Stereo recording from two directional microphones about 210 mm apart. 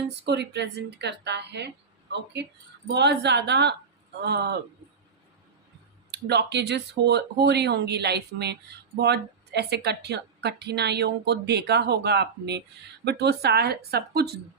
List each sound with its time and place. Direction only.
0.3 s a woman's voice: 55° right (ahead or behind)
6.1 s a woman's voice: 50° right (ahead or behind)